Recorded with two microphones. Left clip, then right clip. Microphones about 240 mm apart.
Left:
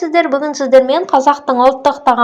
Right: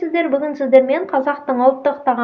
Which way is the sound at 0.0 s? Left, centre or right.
Centre.